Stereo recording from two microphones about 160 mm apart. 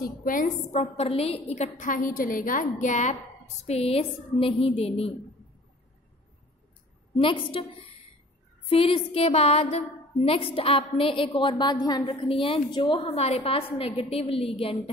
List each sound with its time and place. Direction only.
0.0 s a woman's voice: 60° left (ahead or behind)
3.6 s a woman's voice: 40° left (ahead or behind)
7.2 s a woman's voice: 30° left (ahead or behind)